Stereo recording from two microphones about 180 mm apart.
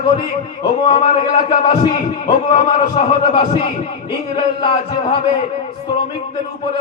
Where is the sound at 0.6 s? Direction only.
25° left (ahead or behind).